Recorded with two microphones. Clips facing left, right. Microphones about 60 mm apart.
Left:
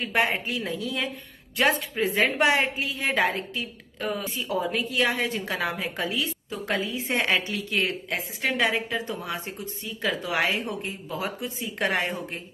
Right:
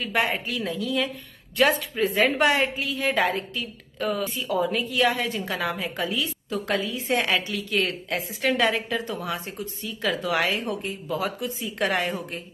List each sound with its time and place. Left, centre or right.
0.0 s a woman's voice: left
2.1 s a woman's voice: left
4.3 s a woman's voice: left